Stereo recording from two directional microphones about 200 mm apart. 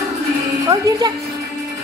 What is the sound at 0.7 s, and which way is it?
Music, 15° right (ahead or behind).